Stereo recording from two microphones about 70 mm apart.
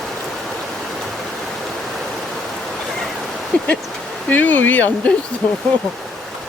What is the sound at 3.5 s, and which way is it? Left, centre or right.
Speech, left.